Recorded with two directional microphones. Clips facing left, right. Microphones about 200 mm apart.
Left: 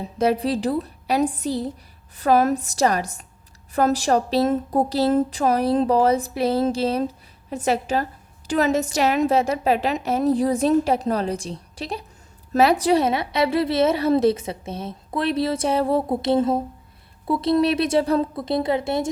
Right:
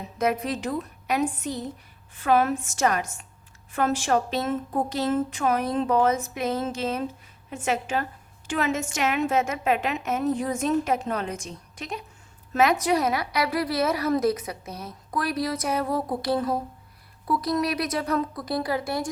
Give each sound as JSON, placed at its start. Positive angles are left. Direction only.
{"t": 0.0, "sound": "a woman's voice", "side_deg": 30}